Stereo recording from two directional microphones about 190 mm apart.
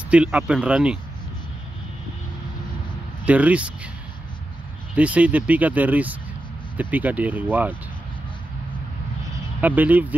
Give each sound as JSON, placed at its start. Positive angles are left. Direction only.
{"t": 0.1, "sound": "speech", "side_deg": -5}
{"t": 3.3, "sound": "speech", "side_deg": -5}
{"t": 4.9, "sound": "speech", "side_deg": -5}
{"t": 9.6, "sound": "speech", "side_deg": -10}